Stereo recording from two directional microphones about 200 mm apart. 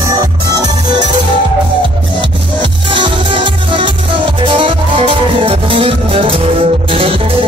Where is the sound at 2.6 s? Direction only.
25° right (ahead or behind).